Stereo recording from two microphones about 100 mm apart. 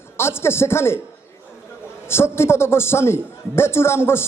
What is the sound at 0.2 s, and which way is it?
Speech, 25° left (ahead or behind).